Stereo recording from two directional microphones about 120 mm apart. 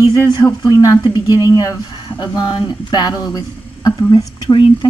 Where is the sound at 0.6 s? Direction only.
30° left (ahead or behind).